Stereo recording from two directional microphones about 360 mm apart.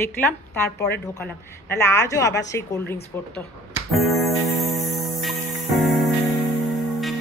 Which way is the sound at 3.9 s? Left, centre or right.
Centre.